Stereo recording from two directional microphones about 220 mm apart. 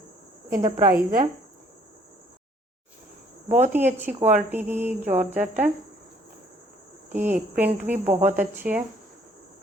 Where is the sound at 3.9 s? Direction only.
10° right (ahead or behind).